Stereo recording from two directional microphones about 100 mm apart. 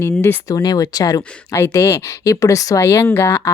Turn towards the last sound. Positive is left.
turn(degrees=30)  # may be behind; listen again after turning